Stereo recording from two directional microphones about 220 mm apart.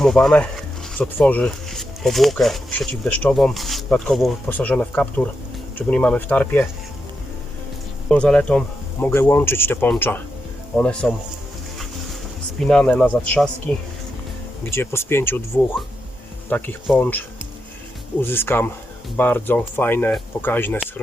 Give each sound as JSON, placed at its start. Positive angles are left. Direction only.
{"t": 0.0, "sound": "speech", "side_deg": 0}
{"t": 8.1, "sound": "speech", "side_deg": 5}
{"t": 12.5, "sound": "speech", "side_deg": 5}
{"t": 16.5, "sound": "speech", "side_deg": 5}